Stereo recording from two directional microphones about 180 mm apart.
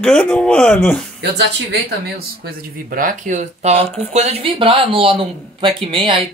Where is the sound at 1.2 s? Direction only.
70° right (ahead or behind).